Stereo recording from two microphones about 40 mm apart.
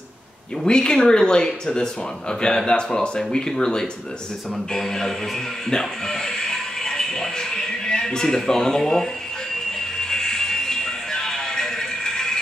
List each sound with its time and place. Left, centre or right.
0.7 s speech: left
4.7 s a sound: centre
5.7 s music: centre